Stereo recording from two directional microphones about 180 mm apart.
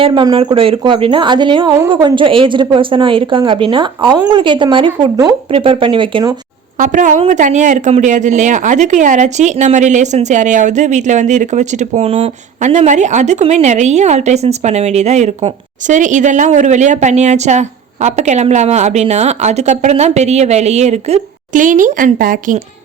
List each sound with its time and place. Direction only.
0.0 s speech: 25° right (ahead or behind)
6.7 s speech: 45° right (ahead or behind)